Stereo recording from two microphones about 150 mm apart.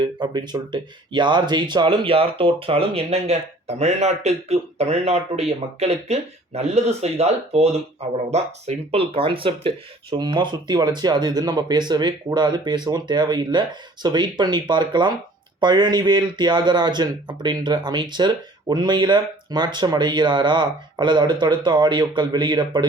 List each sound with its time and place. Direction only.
0.0 s speech: 30° right (ahead or behind)